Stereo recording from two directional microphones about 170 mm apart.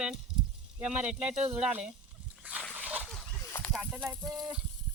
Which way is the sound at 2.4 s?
10° right (ahead or behind).